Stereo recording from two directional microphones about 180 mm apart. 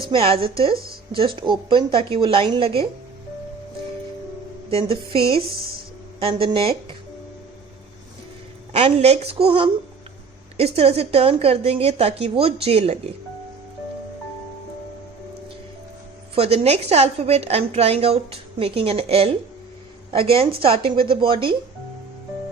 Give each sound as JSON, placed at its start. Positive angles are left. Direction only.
{"t": 0.0, "sound": "a woman's voice", "side_deg": -30}
{"t": 4.7, "sound": "a woman's voice", "side_deg": -30}
{"t": 8.7, "sound": "a woman's voice", "side_deg": -35}
{"t": 16.3, "sound": "a woman's voice", "side_deg": -35}